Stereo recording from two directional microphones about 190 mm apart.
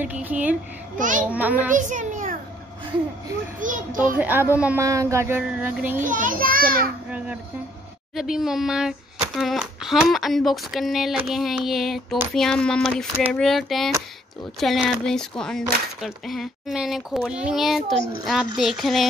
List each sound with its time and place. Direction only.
0.0 s a child's voice: 10° right (ahead or behind)
0.9 s a child's voice: 45° right (ahead or behind)
1.3 s a child's voice: 10° right (ahead or behind)
1.7 s a child's voice: 40° right (ahead or behind)
3.5 s a child's voice: 45° right (ahead or behind)
4.2 s a child's voice: 10° right (ahead or behind)
6.0 s a child's voice: 45° right (ahead or behind)
8.1 s speech: centre (ahead or behind)